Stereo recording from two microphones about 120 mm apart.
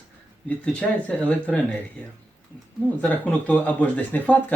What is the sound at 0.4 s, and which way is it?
Speech, 10° left (ahead or behind).